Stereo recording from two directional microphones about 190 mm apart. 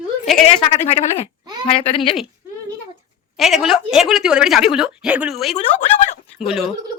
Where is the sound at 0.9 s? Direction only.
35° left (ahead or behind).